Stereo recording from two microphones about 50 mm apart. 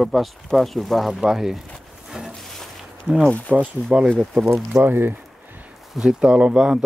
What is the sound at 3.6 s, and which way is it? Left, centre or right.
Speech, right.